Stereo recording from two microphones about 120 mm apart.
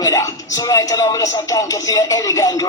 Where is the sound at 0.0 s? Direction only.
25° left (ahead or behind).